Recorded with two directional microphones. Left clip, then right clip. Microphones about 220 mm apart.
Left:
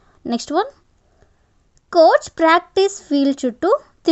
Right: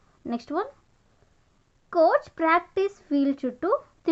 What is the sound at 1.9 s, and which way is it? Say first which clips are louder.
Speech: left 9 dB; 40° left (ahead or behind).